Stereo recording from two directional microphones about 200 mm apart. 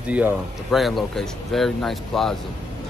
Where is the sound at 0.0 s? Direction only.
10° right (ahead or behind).